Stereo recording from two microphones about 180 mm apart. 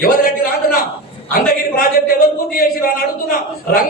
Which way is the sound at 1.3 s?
55° left (ahead or behind).